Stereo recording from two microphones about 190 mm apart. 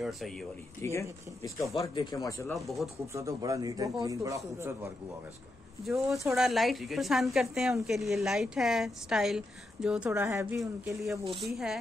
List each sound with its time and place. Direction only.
0.0 s speech: centre (ahead or behind)
0.8 s speech: 15° left (ahead or behind)
1.8 s speech: 25° left (ahead or behind)
2.5 s a woman's voice: centre (ahead or behind)
3.1 s speech: 15° right (ahead or behind)
5.9 s a woman's voice: centre (ahead or behind)
11.3 s a woman's voice: centre (ahead or behind)